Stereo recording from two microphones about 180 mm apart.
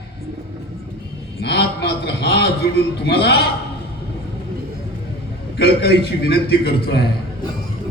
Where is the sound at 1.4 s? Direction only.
65° left (ahead or behind).